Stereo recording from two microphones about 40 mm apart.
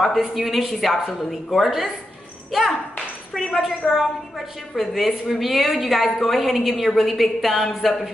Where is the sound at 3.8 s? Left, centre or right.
Centre.